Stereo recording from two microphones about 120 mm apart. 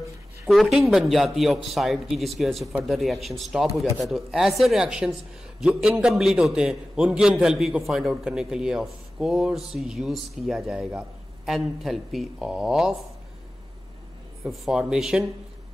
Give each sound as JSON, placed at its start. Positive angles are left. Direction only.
{"t": 0.5, "sound": "a man's voice", "side_deg": 0}
{"t": 14.4, "sound": "a man's voice", "side_deg": 0}